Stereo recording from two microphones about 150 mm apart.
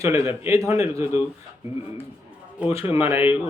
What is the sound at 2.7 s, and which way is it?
Speech, 40° left (ahead or behind).